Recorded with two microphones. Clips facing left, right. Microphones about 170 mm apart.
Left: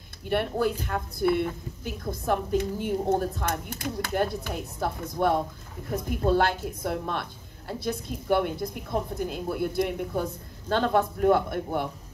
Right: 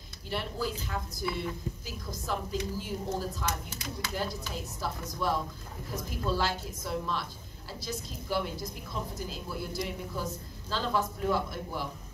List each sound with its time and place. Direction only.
0.3 s a woman's voice: 60° left (ahead or behind)